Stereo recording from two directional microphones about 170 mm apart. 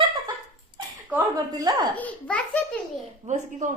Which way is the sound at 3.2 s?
45° right (ahead or behind).